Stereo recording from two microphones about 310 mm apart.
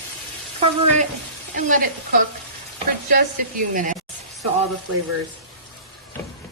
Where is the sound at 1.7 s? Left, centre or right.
Right.